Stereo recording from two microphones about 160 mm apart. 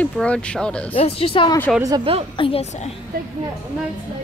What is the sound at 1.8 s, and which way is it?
Speech, 20° right (ahead or behind).